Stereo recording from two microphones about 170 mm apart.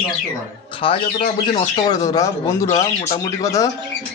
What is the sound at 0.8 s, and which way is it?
A man's voice, 30° left (ahead or behind).